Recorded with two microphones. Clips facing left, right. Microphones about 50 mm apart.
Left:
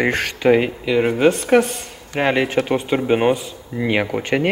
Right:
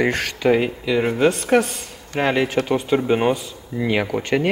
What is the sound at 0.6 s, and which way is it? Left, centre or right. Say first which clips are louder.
Speech: left 2 dB; centre.